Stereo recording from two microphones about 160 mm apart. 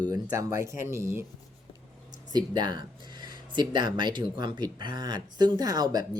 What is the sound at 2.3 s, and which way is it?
Speech, 25° right (ahead or behind).